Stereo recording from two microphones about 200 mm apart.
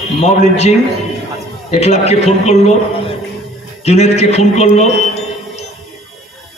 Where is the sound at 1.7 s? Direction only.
30° left (ahead or behind).